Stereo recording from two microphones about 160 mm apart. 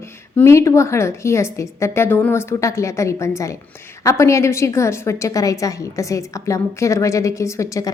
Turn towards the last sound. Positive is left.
turn(degrees=20)  # may be behind; listen again after turning